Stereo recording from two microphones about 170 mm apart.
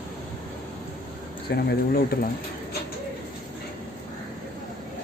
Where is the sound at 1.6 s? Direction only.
65° left (ahead or behind).